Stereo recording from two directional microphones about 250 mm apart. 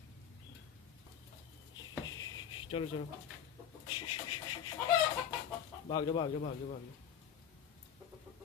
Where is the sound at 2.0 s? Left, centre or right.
Centre.